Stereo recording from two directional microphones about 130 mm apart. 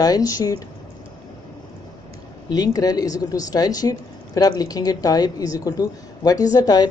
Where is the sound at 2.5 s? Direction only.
30° left (ahead or behind).